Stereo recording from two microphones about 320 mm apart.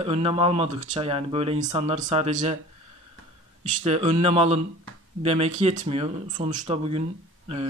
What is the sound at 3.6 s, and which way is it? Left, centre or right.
Speech, centre.